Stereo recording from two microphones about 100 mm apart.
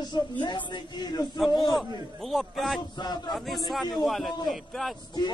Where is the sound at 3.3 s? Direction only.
Centre (ahead or behind).